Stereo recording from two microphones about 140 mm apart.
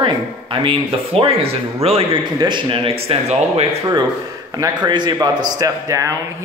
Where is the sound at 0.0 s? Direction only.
35° right (ahead or behind).